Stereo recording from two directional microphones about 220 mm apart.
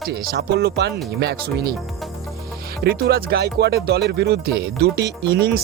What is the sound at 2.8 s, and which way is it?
Speech, 45° right (ahead or behind).